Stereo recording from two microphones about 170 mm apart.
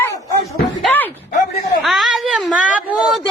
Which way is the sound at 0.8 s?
5° left (ahead or behind).